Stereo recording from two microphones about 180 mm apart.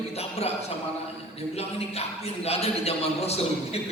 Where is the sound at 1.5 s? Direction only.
35° left (ahead or behind).